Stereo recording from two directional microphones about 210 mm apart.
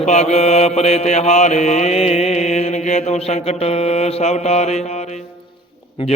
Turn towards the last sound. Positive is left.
turn(degrees=25)  # may be behind; listen again after turning